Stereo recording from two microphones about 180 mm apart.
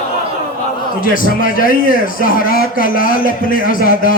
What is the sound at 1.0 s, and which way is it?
A man's voice, 50° left (ahead or behind).